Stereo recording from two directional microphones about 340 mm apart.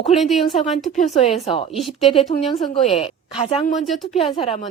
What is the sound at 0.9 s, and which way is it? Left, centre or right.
Speech, left.